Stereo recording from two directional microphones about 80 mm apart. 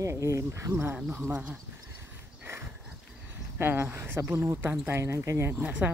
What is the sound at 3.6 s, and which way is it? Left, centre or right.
Speech, right.